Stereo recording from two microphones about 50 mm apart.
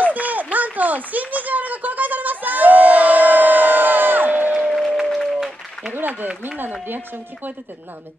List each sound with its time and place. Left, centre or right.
0.0 s a sound: right
5.0 s applause: centre
5.9 s speech: right